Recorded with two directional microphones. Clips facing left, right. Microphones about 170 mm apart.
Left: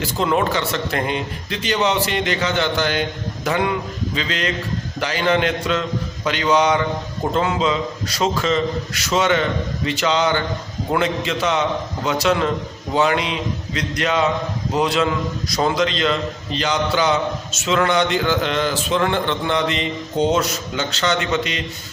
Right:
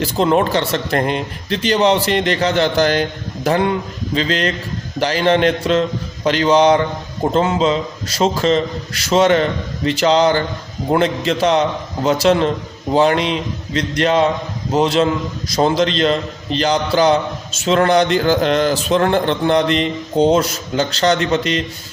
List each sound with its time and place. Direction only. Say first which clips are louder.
0.0 s a man's voice: right 4 dB; 35° right (ahead or behind)